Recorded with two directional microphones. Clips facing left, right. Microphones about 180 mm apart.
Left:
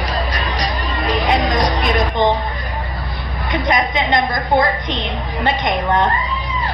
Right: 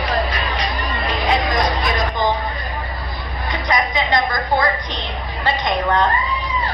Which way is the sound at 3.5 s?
20° left (ahead or behind).